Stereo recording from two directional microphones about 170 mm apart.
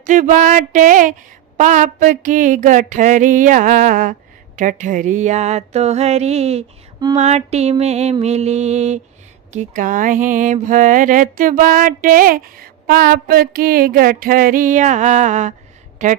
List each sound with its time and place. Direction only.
0.0 s mantra: 50° right (ahead or behind)
4.5 s music: 50° right (ahead or behind)
9.5 s mantra: 45° right (ahead or behind)